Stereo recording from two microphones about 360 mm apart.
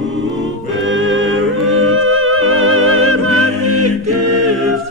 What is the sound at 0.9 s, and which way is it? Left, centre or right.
Music, right.